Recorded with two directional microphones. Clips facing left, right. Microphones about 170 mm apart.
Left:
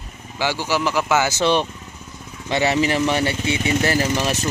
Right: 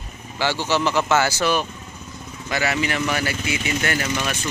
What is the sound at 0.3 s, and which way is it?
Speech, 15° left (ahead or behind).